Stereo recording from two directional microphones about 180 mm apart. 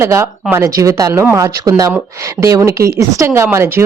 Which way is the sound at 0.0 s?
15° right (ahead or behind).